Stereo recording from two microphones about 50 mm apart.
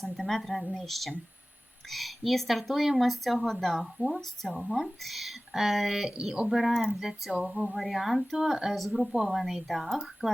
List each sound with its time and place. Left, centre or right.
0.0 s speech: centre
0.6 s speech: centre
0.9 s speech: centre